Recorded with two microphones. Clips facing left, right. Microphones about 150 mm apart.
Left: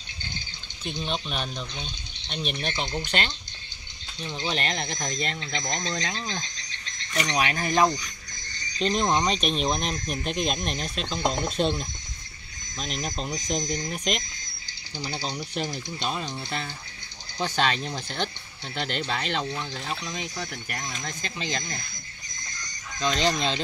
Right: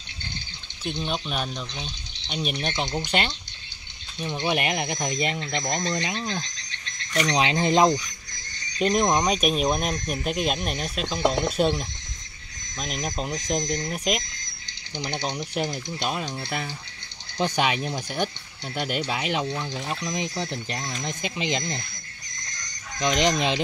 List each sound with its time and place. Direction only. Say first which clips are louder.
0.8 s speech: right 2 dB; centre (ahead or behind)
4.5 s speech: right 4 dB; 10° right (ahead or behind)
7.3 s speech: right 3 dB; 25° right (ahead or behind)
8.7 s speech: right 3 dB; 10° right (ahead or behind)
15.2 s speech: right 3 dB; 10° right (ahead or behind)
22.9 s speech: right 3 dB; 15° right (ahead or behind)